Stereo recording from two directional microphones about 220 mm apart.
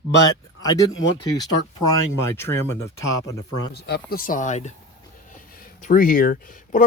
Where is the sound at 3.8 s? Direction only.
45° left (ahead or behind); by 4.7 s 30° left (ahead or behind).